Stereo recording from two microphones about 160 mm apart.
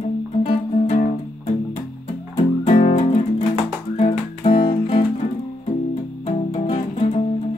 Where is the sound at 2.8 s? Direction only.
40° left (ahead or behind).